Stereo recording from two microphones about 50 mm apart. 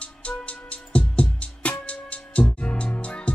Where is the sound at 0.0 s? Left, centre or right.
Left.